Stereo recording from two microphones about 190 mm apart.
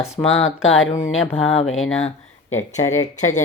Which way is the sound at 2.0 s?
35° left (ahead or behind).